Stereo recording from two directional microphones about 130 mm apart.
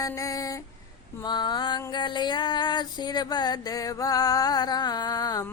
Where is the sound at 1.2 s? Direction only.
35° left (ahead or behind).